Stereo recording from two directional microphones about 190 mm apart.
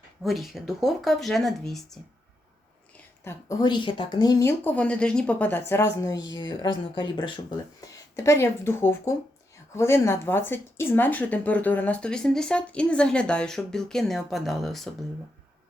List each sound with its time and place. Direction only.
0.2 s speech: centre (ahead or behind)
3.2 s speech: 20° left (ahead or behind); by 14.8 s centre (ahead or behind)